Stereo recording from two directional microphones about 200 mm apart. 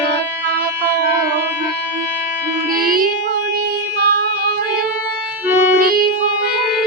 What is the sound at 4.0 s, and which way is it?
Music, 55° right (ahead or behind).